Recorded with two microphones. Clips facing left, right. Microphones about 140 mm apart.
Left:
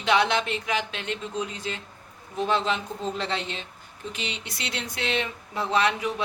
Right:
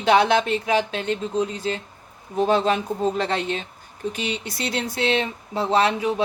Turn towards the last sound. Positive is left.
turn(degrees=-30)  # may be behind; listen again after turning